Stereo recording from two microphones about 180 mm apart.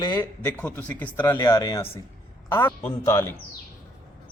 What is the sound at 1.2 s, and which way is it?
A man's voice, 25° left (ahead or behind).